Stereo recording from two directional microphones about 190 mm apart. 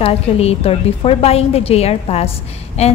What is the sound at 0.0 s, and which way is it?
A woman's voice, 30° left (ahead or behind).